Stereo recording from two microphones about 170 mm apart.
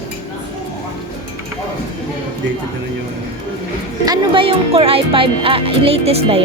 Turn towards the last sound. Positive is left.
turn(degrees=-35)  # may be behind; listen again after turning